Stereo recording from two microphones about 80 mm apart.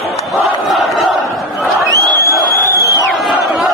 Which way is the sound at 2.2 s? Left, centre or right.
Left.